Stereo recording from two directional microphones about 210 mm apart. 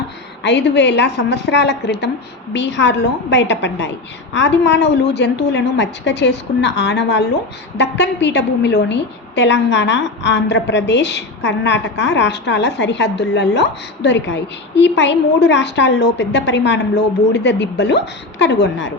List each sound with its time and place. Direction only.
0.4 s a woman's voice: 55° left (ahead or behind)